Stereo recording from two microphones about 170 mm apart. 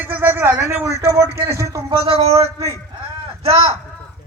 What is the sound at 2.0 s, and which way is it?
Speech, 35° right (ahead or behind).